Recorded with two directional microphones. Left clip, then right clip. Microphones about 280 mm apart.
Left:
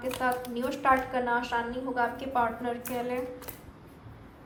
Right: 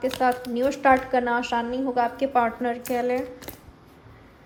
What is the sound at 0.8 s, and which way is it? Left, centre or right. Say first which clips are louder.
A woman's voice: right 5 dB; right.